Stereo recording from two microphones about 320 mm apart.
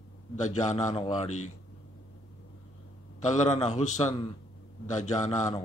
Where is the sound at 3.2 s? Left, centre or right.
Left.